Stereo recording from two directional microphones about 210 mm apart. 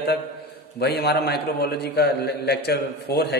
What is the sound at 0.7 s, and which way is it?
Speech, 50° left (ahead or behind).